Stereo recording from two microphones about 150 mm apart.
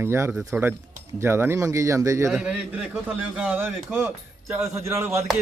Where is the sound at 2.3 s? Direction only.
5° right (ahead or behind).